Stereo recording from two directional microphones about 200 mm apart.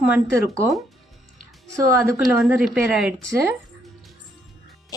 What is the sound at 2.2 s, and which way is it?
Speech, centre (ahead or behind).